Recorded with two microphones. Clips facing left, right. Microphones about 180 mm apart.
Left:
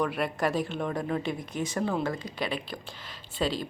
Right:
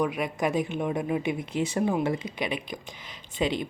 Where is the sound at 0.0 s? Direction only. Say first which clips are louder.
Right 1 dB; 15° right (ahead or behind).